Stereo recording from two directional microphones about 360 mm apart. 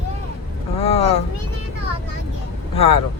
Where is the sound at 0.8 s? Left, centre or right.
Centre.